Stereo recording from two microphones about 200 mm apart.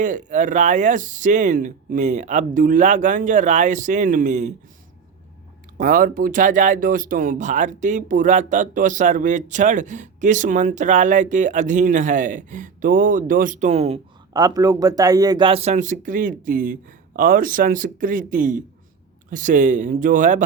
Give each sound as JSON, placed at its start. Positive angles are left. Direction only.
{"t": 0.0, "sound": "speech", "side_deg": -40}
{"t": 5.7, "sound": "speech", "side_deg": -45}
{"t": 14.3, "sound": "speech", "side_deg": -20}